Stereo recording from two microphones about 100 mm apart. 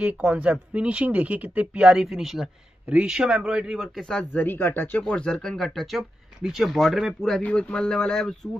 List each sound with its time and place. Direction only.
0.0 s speech: 10° right (ahead or behind)
4.2 s speech: 20° left (ahead or behind)
5.0 s speech: 10° left (ahead or behind)